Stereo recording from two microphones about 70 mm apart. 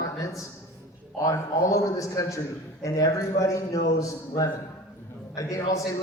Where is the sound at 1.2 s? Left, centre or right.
Left.